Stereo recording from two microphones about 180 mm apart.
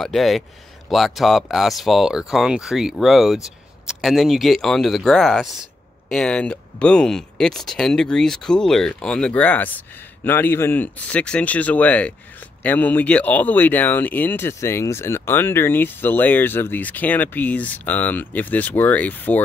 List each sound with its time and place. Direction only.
0.0 s speech: centre (ahead or behind)